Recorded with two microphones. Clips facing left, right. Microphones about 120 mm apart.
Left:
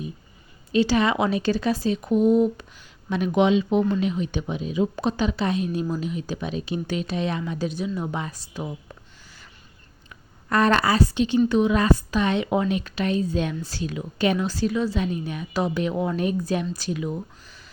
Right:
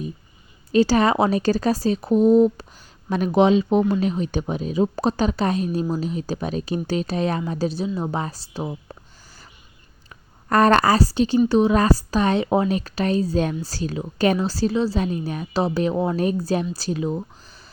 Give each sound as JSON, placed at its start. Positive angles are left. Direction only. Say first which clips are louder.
{"t": 0.7, "sound": "a woman's voice", "louder": "right 3 dB", "side_deg": -40}